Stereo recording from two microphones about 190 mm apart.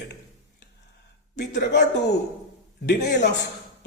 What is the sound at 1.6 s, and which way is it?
A woman's voice, 60° left (ahead or behind).